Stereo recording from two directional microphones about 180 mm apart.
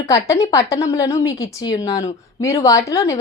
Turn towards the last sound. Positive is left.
turn(degrees=15)  # may be behind; listen again after turning